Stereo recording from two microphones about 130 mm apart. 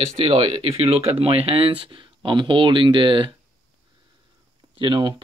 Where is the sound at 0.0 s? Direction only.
50° right (ahead or behind).